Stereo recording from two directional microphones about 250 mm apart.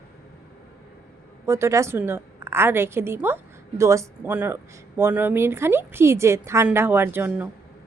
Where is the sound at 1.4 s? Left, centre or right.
Centre.